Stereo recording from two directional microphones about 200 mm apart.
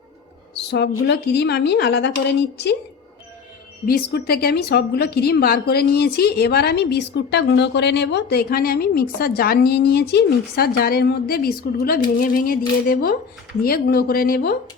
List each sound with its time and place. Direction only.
0.7 s a woman's voice: 60° left (ahead or behind)
3.8 s a woman's voice: 50° left (ahead or behind)